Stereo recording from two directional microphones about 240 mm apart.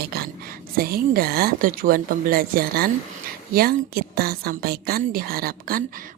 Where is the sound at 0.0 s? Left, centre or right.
Right.